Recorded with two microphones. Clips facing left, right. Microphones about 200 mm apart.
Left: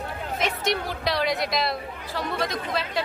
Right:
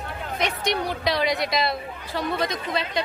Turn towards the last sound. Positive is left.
turn(degrees=0)  # may be behind; listen again after turning